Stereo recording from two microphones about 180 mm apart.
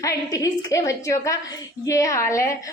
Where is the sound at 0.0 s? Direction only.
20° left (ahead or behind).